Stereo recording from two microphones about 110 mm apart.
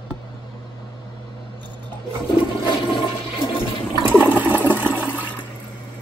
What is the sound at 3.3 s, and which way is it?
Toilet flush, 45° left (ahead or behind).